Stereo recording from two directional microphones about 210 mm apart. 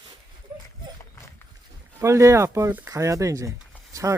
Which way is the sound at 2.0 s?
15° right (ahead or behind).